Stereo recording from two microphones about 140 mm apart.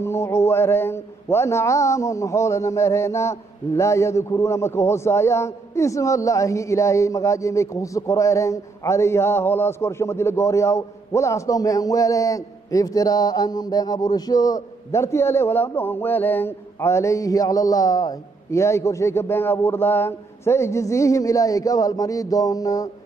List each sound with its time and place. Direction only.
0.0 s a man's voice: 20° left (ahead or behind)